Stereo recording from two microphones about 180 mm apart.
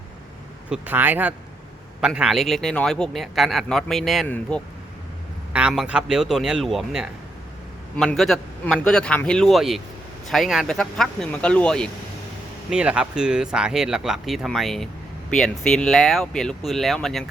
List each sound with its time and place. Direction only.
0.7 s a man's voice: 10° right (ahead or behind); by 4.6 s 5° left (ahead or behind)
5.5 s a man's voice: 5° right (ahead or behind)
12.7 s a man's voice: 5° right (ahead or behind)